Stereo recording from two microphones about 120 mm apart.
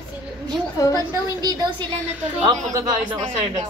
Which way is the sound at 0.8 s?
30° left (ahead or behind).